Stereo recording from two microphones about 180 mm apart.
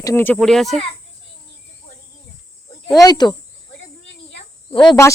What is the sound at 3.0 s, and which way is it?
Speech, 20° left (ahead or behind).